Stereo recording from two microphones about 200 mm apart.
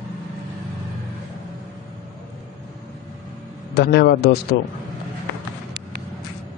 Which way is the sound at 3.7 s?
55° left (ahead or behind).